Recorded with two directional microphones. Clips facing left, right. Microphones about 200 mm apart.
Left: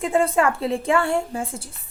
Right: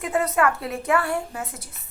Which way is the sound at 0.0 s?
30° left (ahead or behind).